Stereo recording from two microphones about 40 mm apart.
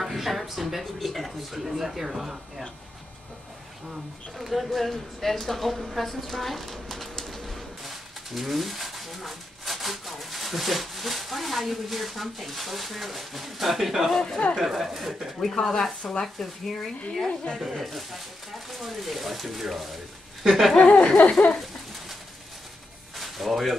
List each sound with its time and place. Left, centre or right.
0.0 s speech: centre
4.4 s speech: centre
7.2 s bird: centre
8.4 s speech: centre
15.6 s speech: centre
16.0 s speech: centre
16.3 s speech: centre
20.7 s speech: left
23.1 s a sound: centre